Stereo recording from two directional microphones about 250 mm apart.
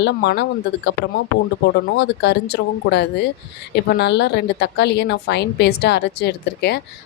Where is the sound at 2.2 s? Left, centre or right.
Left.